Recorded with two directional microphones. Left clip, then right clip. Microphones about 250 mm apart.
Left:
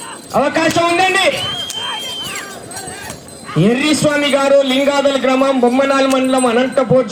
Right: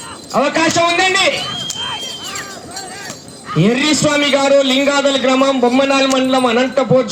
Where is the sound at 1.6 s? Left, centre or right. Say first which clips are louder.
Even; centre.